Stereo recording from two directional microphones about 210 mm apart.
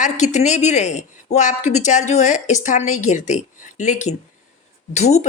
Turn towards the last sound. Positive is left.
turn(degrees=30)  # may be behind; listen again after turning